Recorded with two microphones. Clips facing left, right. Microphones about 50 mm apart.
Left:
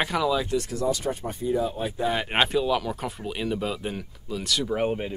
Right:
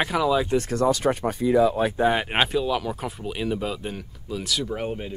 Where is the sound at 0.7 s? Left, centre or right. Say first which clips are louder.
Right 5 dB; right.